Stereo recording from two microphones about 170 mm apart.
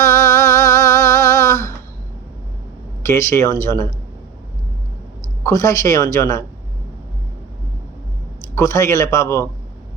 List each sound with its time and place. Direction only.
0.0 s music: 20° left (ahead or behind)
3.0 s speech: 15° left (ahead or behind)
5.4 s speech: 20° left (ahead or behind)
8.5 s speech: 15° left (ahead or behind)